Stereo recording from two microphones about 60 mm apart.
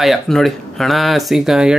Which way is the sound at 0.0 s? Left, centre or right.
Centre.